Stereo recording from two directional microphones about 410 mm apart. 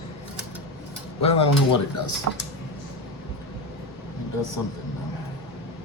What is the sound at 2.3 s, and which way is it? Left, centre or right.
Speech, right.